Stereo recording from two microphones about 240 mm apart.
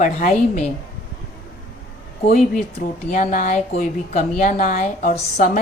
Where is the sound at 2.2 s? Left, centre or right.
Left.